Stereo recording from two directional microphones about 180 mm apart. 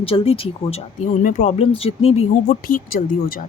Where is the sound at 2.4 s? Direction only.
55° left (ahead or behind).